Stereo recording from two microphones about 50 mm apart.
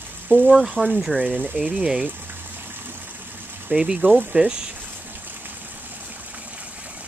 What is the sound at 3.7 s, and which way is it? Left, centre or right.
Speech, centre.